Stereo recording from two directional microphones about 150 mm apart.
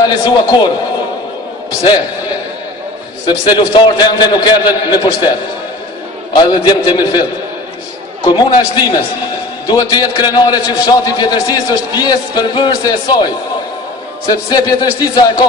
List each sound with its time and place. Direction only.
0.0 s a man's voice: 30° left (ahead or behind)
3.3 s a man's voice: 30° left (ahead or behind)
6.3 s a man's voice: 30° left (ahead or behind)
8.3 s a man's voice: 30° left (ahead or behind)
14.3 s a man's voice: 30° left (ahead or behind)